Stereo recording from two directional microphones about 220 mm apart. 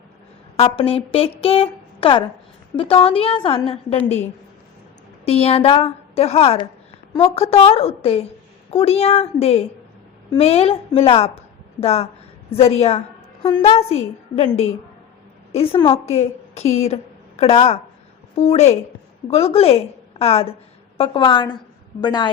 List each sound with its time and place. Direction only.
0.5 s a woman's voice: 25° left (ahead or behind)